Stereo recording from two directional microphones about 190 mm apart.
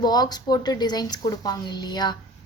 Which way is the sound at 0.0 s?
20° left (ahead or behind).